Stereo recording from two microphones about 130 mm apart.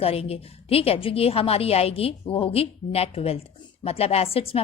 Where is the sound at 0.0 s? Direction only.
50° left (ahead or behind).